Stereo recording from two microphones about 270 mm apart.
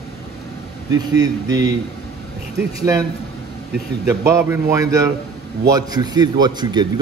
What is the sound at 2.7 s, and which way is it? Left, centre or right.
Speech, centre.